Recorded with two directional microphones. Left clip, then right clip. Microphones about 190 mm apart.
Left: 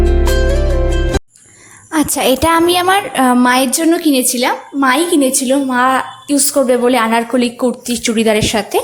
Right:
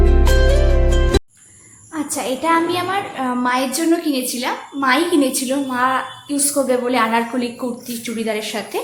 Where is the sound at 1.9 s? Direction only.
55° left (ahead or behind).